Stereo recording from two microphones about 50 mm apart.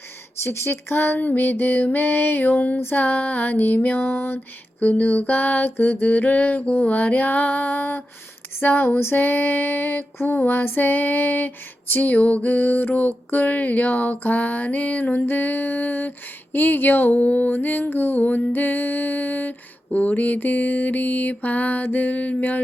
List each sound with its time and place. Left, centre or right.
0.4 s speech: left
1.2 s female singing: left
3.8 s a sound: left
4.8 s female singing: left
8.6 s a sound: left
9.1 s female singing: left